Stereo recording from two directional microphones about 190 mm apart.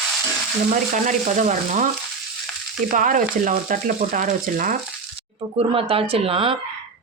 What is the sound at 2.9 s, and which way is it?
Speech, 45° right (ahead or behind).